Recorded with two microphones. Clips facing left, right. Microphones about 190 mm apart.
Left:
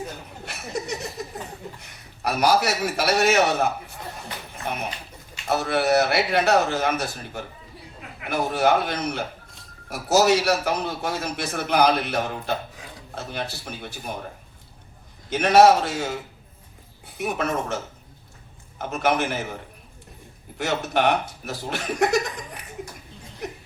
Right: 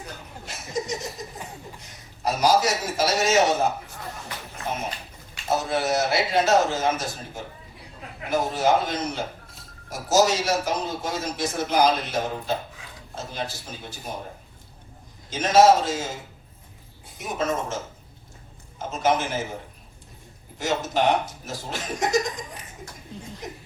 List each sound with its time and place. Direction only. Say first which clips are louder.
0.4 s a man's voice: right 1 dB; 60° left (ahead or behind)
5.5 s a man's voice: left 3 dB; 65° left (ahead or behind)
15.3 s a man's voice: left 1 dB; 65° left (ahead or behind)
17.2 s a man's voice: left 1 dB; 65° left (ahead or behind)
18.8 s a man's voice: even; 65° left (ahead or behind)
20.6 s a man's voice: left 1 dB; 65° left (ahead or behind)